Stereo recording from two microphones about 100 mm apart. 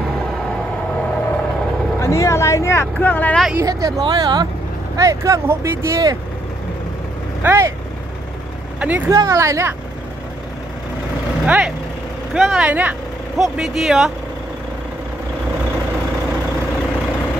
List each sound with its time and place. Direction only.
2.0 s speech: 30° left (ahead or behind)
3.5 s speech: 30° right (ahead or behind)
4.0 s speech: 45° right (ahead or behind)
4.9 s speech: 35° right (ahead or behind)
7.4 s speech: 30° right (ahead or behind)
8.7 s speech: 15° right (ahead or behind)
9.1 s speech: 35° right (ahead or behind)
11.4 s speech: 15° right (ahead or behind)
12.4 s speech: 5° right (ahead or behind)
12.6 s speech: 15° right (ahead or behind)
13.4 s speech: 5° right (ahead or behind)